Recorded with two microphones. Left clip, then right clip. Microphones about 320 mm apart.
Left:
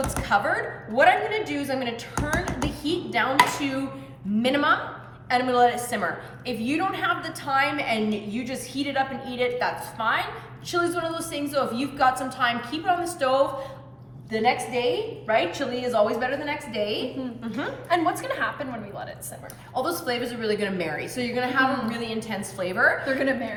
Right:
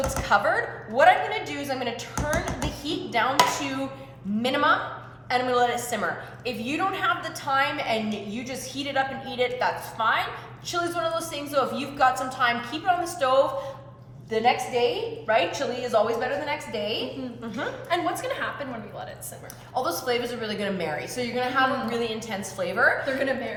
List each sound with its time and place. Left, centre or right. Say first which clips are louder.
0.2 s a woman's voice: right 1 dB; centre
4.4 s a woman's voice: even; centre
19.7 s a woman's voice: right 1 dB; centre
23.0 s a woman's voice: left 1 dB; centre